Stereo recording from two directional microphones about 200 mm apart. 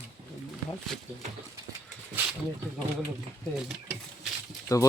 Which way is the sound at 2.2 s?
10° right (ahead or behind).